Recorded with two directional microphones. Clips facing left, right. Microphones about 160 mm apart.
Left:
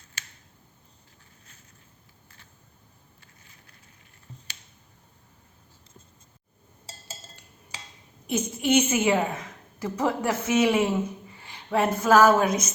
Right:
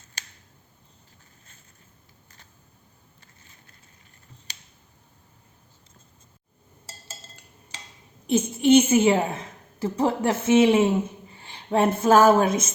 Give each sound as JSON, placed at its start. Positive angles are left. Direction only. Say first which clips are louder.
{"t": 8.3, "sound": "a woman's voice", "louder": "right 6 dB", "side_deg": -30}